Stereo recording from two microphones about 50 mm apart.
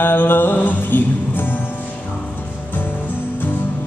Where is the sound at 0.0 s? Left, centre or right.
Left.